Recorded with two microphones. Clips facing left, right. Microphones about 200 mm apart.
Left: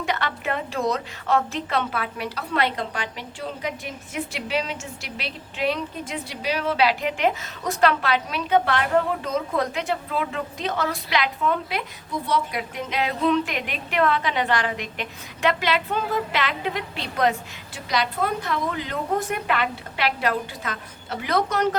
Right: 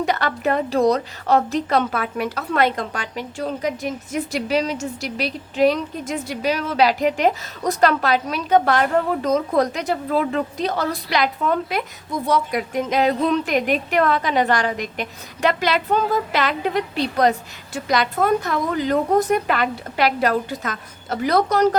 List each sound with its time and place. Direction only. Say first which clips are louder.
0.0 s a woman's voice: right 6 dB; 40° right (ahead or behind)